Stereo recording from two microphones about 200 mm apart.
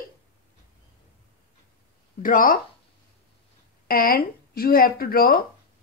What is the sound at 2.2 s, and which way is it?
Speech, 45° left (ahead or behind).